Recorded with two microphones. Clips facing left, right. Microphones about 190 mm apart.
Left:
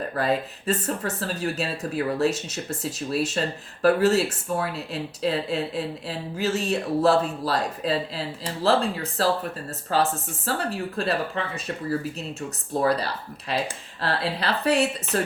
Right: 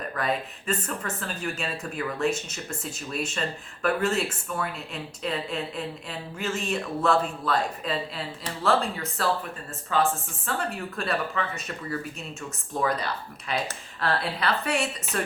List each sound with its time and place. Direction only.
0.0 s speech: 35° left (ahead or behind)
14.0 s speech: 30° left (ahead or behind)